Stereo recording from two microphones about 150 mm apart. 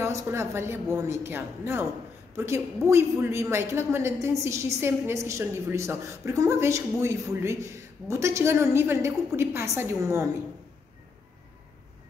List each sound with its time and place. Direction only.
0.0 s a woman's voice: 20° right (ahead or behind)